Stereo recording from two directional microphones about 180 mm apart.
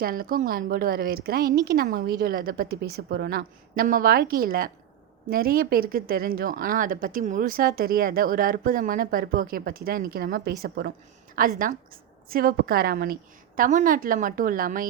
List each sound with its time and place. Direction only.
0.0 s a woman's voice: 55° right (ahead or behind)